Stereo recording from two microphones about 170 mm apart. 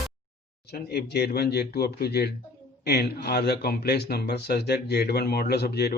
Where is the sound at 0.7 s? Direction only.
65° left (ahead or behind).